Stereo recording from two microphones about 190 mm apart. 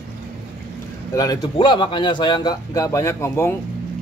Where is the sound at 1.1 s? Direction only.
20° left (ahead or behind).